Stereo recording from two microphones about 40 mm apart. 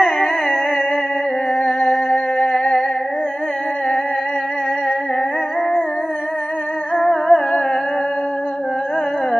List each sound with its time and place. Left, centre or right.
0.0 s music: left
2.0 s humming: left
7.2 s music: left